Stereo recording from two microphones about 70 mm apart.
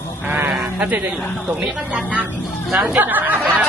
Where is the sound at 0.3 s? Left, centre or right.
Right.